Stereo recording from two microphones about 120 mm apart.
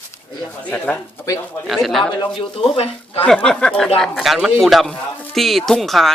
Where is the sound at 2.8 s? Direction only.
55° left (ahead or behind).